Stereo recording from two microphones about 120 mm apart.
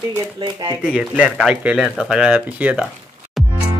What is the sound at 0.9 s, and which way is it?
A man's voice, 5° right (ahead or behind).